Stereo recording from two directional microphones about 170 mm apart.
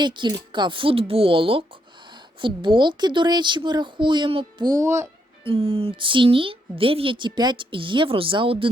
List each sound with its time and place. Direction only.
0.0 s a woman's voice: 25° right (ahead or behind)
5.4 s a woman's voice: 35° right (ahead or behind)